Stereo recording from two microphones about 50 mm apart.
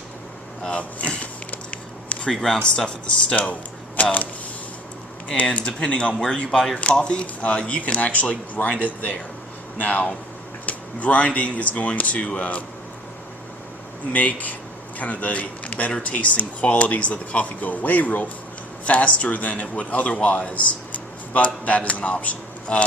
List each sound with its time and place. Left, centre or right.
0.7 s a sound: left
2.2 s speech: centre
4.0 s speech: left
5.5 s speech: left
14.1 s a man's voice: left